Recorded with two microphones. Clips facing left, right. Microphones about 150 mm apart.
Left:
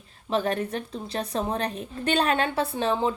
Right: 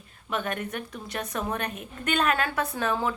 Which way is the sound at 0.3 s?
30° left (ahead or behind).